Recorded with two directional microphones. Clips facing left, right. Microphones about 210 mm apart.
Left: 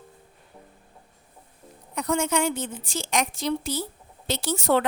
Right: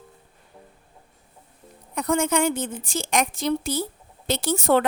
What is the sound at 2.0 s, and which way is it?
A woman's voice, 50° right (ahead or behind).